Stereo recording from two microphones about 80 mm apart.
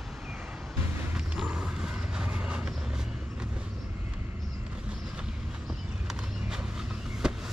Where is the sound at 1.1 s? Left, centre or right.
Centre.